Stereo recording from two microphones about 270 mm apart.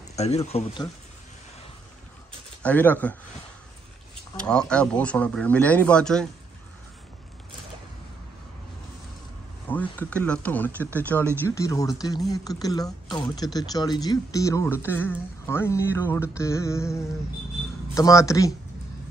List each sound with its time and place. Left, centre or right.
0.1 s speech: left
2.6 s speech: centre
4.4 s speech: centre
9.7 s speech: centre